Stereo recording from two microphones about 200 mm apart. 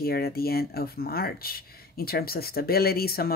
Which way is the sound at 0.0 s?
50° left (ahead or behind).